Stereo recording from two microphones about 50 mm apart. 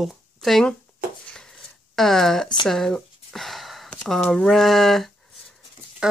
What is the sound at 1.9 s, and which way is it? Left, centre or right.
Speech, centre.